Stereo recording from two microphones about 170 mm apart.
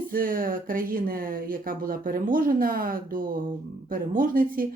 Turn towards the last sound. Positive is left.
turn(degrees=-55)  # may be behind; listen again after turning